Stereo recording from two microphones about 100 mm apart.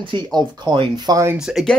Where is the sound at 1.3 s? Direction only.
5° right (ahead or behind).